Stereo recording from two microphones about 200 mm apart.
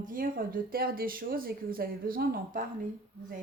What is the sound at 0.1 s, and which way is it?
A woman's voice, 45° right (ahead or behind).